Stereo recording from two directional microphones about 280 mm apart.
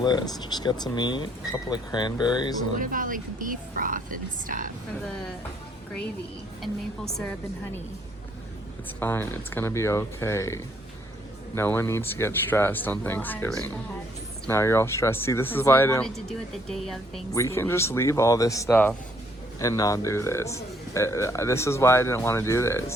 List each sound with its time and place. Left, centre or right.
0.0 s speech: centre
2.7 s speech: right
6.6 s a woman's voice: centre
9.0 s speech: centre